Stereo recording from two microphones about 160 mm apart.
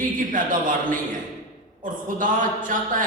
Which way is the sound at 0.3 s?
55° right (ahead or behind).